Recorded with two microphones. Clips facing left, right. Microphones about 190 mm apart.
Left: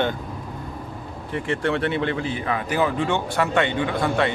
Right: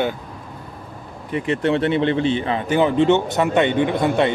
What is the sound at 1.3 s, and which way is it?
Speech, 20° right (ahead or behind).